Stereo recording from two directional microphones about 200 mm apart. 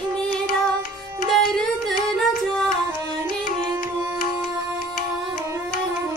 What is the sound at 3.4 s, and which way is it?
Music, 45° left (ahead or behind).